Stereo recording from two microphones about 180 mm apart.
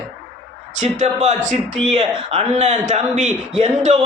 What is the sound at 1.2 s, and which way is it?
A man's voice, 40° right (ahead or behind).